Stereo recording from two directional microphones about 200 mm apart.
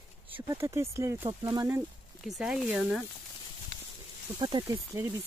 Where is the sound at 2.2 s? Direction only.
Centre (ahead or behind).